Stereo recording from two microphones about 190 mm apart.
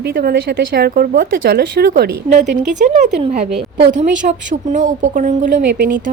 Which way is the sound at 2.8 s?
40° right (ahead or behind).